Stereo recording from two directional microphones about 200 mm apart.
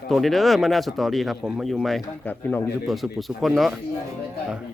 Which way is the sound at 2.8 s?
Centre (ahead or behind).